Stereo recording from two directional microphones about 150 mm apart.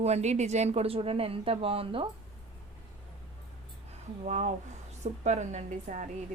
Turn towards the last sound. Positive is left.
turn(degrees=-55)  # may be behind; listen again after turning